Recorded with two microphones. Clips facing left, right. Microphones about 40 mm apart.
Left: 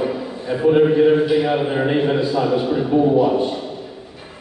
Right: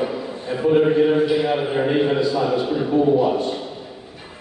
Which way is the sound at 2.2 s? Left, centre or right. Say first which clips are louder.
Left 1 dB; left.